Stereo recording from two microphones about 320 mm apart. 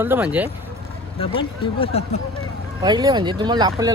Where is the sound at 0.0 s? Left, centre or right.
Centre.